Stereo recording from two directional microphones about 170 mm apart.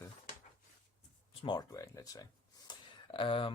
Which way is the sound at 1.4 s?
25° left (ahead or behind).